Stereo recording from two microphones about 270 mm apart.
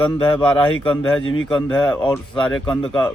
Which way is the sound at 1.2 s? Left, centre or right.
Left.